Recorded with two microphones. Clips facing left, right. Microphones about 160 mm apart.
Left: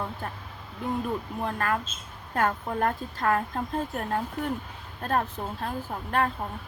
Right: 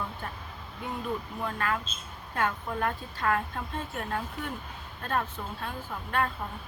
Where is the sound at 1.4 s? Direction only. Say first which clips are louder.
Left 4 dB; 40° left (ahead or behind).